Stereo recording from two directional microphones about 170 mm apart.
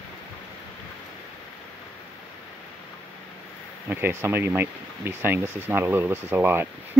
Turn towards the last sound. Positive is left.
turn(degrees=-15)  # may be behind; listen again after turning